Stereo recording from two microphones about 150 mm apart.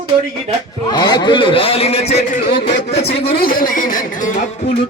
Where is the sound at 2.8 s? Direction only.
45° left (ahead or behind).